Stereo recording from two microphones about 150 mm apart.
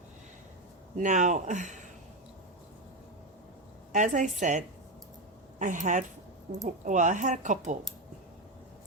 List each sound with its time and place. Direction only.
0.9 s speech: 55° right (ahead or behind)
3.9 s speech: 55° right (ahead or behind)